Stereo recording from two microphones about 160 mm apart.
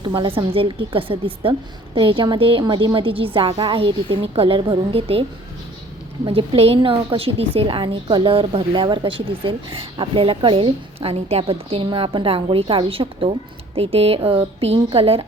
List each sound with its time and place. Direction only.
0.0 s a woman's voice: 30° right (ahead or behind)
6.2 s a woman's voice: 35° right (ahead or behind)